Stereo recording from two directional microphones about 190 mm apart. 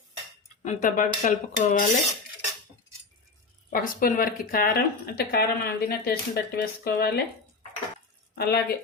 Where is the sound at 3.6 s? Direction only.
45° left (ahead or behind).